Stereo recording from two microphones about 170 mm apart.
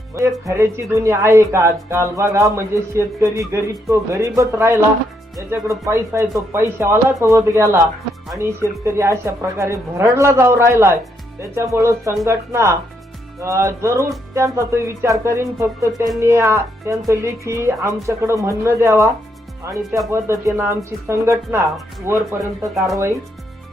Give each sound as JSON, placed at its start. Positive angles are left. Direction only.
{"t": 0.4, "sound": "speech", "side_deg": -15}